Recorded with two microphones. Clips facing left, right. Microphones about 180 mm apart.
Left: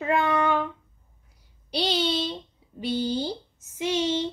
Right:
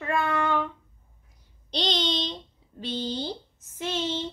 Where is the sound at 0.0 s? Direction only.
20° left (ahead or behind).